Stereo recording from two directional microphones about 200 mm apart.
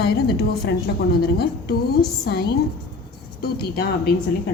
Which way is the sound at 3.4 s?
50° left (ahead or behind).